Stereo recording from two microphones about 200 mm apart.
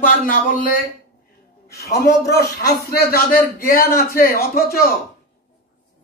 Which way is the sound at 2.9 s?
50° left (ahead or behind).